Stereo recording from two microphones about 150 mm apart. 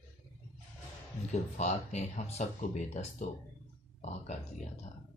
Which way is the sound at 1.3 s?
50° left (ahead or behind).